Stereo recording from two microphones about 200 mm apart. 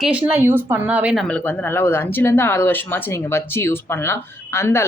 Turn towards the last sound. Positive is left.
turn(degrees=15)  # may be behind; listen again after turning